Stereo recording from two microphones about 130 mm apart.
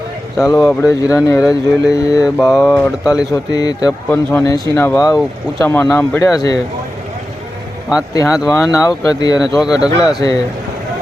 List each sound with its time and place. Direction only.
0.3 s speech: 25° left (ahead or behind)
0.6 s speech: 5° left (ahead or behind)
0.9 s speech: 25° left (ahead or behind)
2.4 s speech: centre (ahead or behind)
3.0 s speech: 25° left (ahead or behind)
4.1 s speech: 15° left (ahead or behind)
4.4 s speech: 30° left (ahead or behind)
8.1 s speech: 25° left (ahead or behind)
9.6 s speech: 5° right (ahead or behind)
10.0 s speech: 30° left (ahead or behind)